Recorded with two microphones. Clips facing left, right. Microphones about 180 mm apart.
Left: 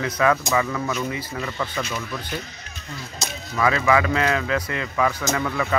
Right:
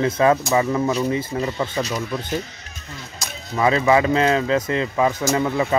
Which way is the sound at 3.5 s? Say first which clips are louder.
Right 3 dB; 25° right (ahead or behind).